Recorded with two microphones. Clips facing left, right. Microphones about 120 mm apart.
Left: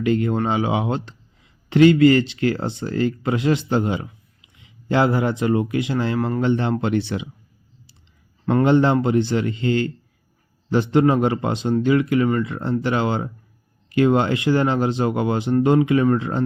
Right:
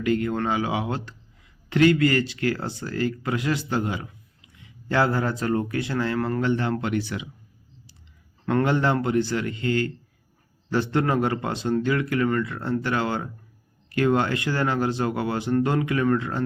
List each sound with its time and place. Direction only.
0.0 s speech: 25° left (ahead or behind)
6.1 s speech: 10° left (ahead or behind)
6.4 s speech: 25° left (ahead or behind)
8.4 s speech: 25° left (ahead or behind)
10.9 s speech: 20° left (ahead or behind)